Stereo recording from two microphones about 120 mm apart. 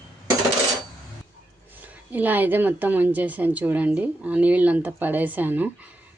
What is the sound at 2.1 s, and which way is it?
Speech, 15° right (ahead or behind).